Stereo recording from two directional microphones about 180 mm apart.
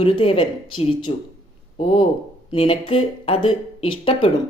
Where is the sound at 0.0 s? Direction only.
30° left (ahead or behind).